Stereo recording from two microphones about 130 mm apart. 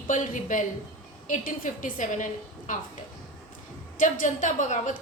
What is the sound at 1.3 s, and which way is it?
A woman's voice, 90° left.